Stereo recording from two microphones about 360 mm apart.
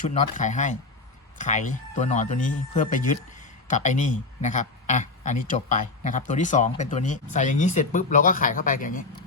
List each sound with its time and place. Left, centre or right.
0.1 s speech: centre